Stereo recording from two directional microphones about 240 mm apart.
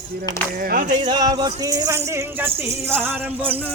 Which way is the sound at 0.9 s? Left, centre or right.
Centre.